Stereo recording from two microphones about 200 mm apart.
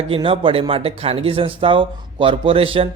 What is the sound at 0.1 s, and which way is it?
Speech, 25° right (ahead or behind).